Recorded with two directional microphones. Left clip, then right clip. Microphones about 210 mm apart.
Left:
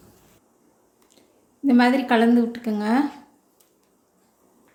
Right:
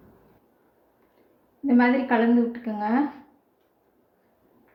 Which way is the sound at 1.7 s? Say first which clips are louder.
Left 3 dB; 55° left (ahead or behind).